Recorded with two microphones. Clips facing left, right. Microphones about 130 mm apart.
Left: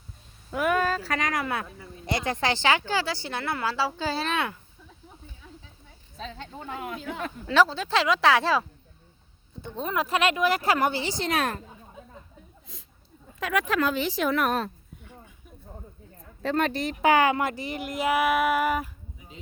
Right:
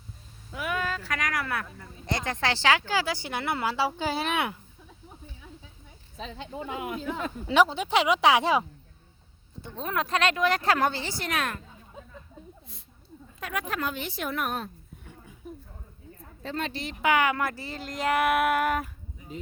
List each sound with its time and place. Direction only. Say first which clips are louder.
0.5 s speech: left 7 dB; 50° left (ahead or behind); by 1.6 s 25° left (ahead or behind)
1.6 s speech: left 1 dB; 10° left (ahead or behind); by 4.5 s 15° right (ahead or behind)
6.2 s speech: right 2 dB; 10° right (ahead or behind)
9.7 s speech: left 2 dB; 5° left (ahead or behind); by 11.6 s 35° left (ahead or behind)
13.4 s speech: left 6 dB; 90° left
16.4 s speech: left 7 dB; 65° left (ahead or behind); by 17.3 s 35° left (ahead or behind)
17.3 s speech: left 3 dB; 20° left (ahead or behind); by 18.9 s 5° left (ahead or behind)